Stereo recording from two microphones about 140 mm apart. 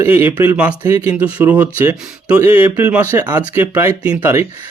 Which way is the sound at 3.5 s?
15° right (ahead or behind).